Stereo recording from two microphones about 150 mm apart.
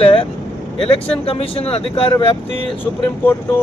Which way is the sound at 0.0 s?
35° left (ahead or behind).